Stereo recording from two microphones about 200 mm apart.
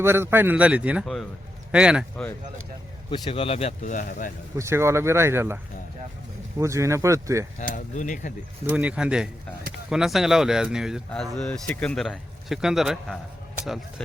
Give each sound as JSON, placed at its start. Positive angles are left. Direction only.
{"t": 0.0, "sound": "a man's voice", "side_deg": -10}
{"t": 3.1, "sound": "a man's voice", "side_deg": 30}
{"t": 4.5, "sound": "a man's voice", "side_deg": -15}
{"t": 6.6, "sound": "a man's voice", "side_deg": -15}
{"t": 7.9, "sound": "a man's voice", "side_deg": 40}
{"t": 8.6, "sound": "a man's voice", "side_deg": -5}